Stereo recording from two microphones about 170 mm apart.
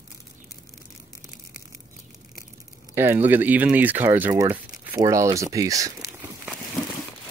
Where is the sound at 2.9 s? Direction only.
15° right (ahead or behind).